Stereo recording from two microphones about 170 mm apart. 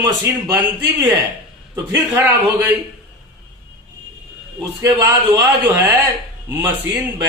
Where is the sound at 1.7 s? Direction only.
15° right (ahead or behind).